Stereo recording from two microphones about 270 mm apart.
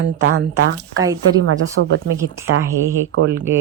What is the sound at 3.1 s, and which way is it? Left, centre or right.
Speech, right.